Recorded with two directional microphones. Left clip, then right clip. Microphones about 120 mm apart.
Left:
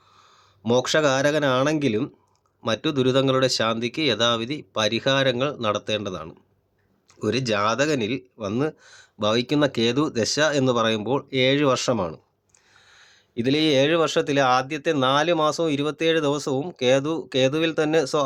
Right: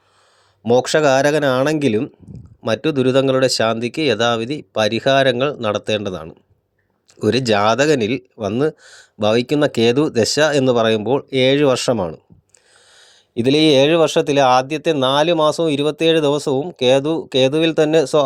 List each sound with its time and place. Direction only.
0.7 s speech: 35° right (ahead or behind)
11.9 s speech: 25° right (ahead or behind)
12.9 s speech: 45° right (ahead or behind)